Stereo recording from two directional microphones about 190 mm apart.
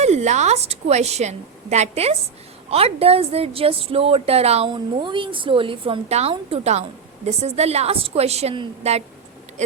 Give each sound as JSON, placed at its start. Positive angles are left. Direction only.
{"t": 0.0, "sound": "a woman's voice", "side_deg": -35}